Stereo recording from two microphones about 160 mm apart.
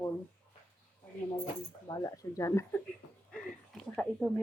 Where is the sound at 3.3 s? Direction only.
5° left (ahead or behind).